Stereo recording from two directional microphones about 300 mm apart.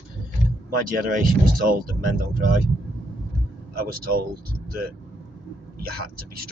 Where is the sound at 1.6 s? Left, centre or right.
Right.